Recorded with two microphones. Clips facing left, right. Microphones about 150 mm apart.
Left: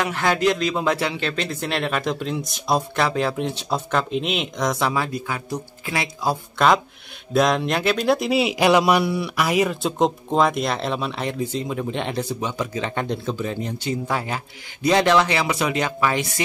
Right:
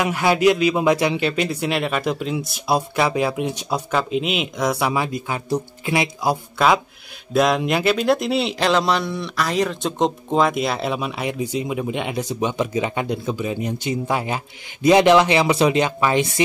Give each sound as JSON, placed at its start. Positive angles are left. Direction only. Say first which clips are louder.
{"t": 0.0, "sound": "a man's voice", "louder": "right 4 dB", "side_deg": -10}
{"t": 6.6, "sound": "a man's voice", "louder": "even", "side_deg": -5}